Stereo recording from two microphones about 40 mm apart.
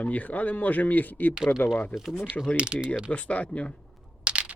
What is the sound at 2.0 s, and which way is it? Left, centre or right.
Speech, centre.